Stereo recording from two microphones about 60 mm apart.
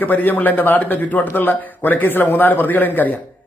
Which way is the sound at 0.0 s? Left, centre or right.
Left.